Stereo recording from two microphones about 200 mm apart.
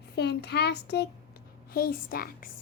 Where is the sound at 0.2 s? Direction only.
55° left (ahead or behind).